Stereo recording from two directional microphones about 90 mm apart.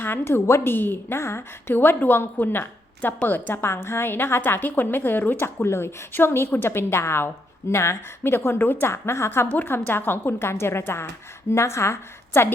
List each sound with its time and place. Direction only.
0.0 s a woman's voice: 25° left (ahead or behind)